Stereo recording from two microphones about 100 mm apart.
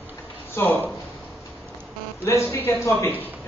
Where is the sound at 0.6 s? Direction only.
25° left (ahead or behind).